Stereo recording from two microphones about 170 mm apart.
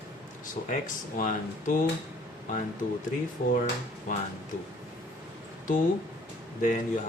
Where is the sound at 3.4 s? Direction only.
50° left (ahead or behind).